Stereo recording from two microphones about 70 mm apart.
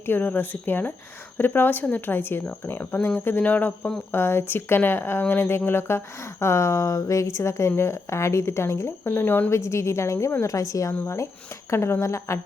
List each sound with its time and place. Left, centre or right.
0.0 s speech: left
4.1 s speech: left
9.5 s speech: left